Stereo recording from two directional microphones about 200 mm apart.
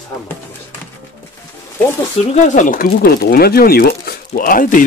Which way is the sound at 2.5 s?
40° left (ahead or behind).